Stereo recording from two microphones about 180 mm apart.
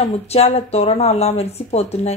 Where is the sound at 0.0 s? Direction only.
35° left (ahead or behind).